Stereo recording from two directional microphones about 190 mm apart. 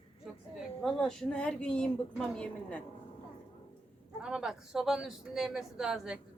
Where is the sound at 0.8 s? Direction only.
5° left (ahead or behind).